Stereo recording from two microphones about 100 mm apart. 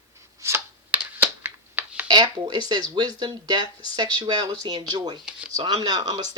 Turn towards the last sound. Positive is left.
turn(degrees=-45)  # may be behind; listen again after turning